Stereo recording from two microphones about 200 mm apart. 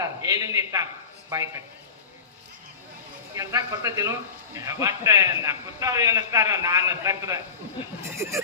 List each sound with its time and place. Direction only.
0.0 s a man's voice: 15° right (ahead or behind)
3.3 s a man's voice: 15° right (ahead or behind)